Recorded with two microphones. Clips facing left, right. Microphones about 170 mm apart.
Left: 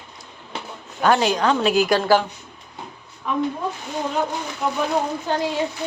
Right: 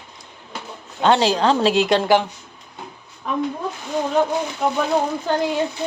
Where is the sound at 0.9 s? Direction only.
25° right (ahead or behind).